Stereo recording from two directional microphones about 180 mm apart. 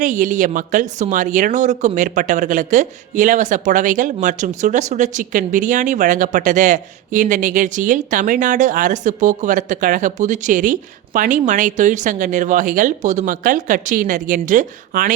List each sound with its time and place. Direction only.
0.0 s speech: 45° right (ahead or behind)